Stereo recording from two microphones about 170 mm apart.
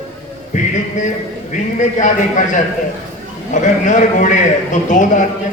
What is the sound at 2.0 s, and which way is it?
A man's voice, 45° left (ahead or behind).